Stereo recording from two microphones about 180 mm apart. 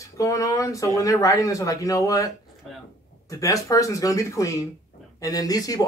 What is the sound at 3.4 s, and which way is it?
Speech, 20° left (ahead or behind).